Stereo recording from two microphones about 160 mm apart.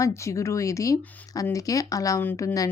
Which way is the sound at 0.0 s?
20° left (ahead or behind).